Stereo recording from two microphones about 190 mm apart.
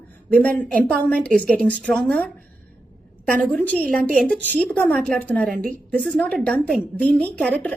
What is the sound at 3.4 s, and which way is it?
A woman's voice, 5° left (ahead or behind).